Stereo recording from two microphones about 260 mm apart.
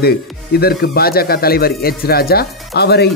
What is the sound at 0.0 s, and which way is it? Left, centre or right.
Speech, left.